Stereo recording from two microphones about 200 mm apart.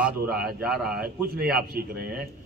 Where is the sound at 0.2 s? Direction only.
50° right (ahead or behind).